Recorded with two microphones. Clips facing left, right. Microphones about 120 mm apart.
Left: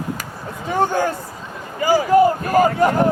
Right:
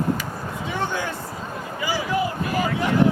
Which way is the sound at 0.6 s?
45° left (ahead or behind).